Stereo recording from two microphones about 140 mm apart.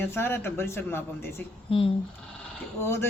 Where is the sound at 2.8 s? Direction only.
20° left (ahead or behind).